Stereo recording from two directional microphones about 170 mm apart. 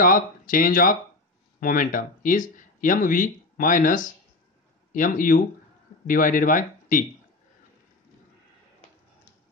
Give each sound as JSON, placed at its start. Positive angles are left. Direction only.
{"t": 0.0, "sound": "speech", "side_deg": 55}